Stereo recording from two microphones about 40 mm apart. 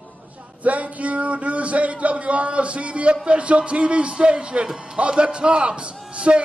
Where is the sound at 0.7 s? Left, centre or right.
Right.